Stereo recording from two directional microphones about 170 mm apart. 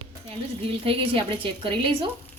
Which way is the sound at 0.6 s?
35° right (ahead or behind).